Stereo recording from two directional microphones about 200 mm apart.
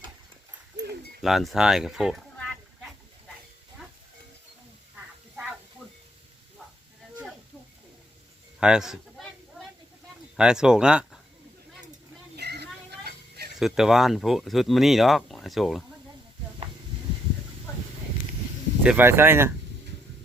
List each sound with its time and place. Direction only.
1.2 s speech: centre (ahead or behind)
8.6 s a sound: 5° right (ahead or behind)
10.3 s speech: 5° right (ahead or behind)
12.4 s a sound: 55° right (ahead or behind)
13.6 s speech: centre (ahead or behind)
18.8 s speech: 10° right (ahead or behind)